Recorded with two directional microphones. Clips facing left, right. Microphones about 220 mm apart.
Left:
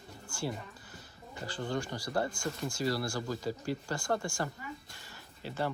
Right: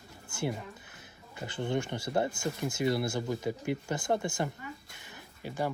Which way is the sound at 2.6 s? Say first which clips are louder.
Right 4 dB; 20° right (ahead or behind).